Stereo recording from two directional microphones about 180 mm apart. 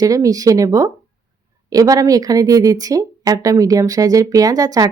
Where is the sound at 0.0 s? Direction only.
20° right (ahead or behind).